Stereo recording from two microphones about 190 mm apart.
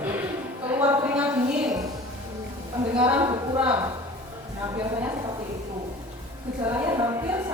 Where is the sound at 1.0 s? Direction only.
5° right (ahead or behind).